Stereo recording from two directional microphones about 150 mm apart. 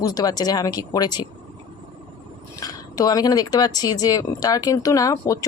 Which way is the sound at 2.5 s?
25° left (ahead or behind).